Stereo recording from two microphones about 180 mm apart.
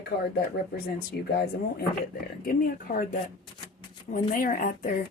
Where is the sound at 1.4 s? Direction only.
60° left (ahead or behind).